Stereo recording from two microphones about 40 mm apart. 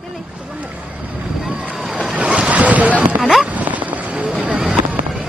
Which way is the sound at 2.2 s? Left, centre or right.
Right.